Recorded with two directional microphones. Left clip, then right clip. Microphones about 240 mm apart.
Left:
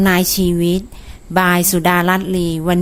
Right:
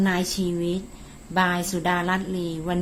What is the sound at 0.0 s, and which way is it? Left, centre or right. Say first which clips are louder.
A woman's voice: left 10 dB; left.